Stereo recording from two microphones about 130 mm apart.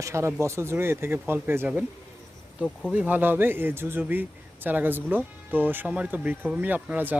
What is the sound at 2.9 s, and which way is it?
Speech, 10° right (ahead or behind).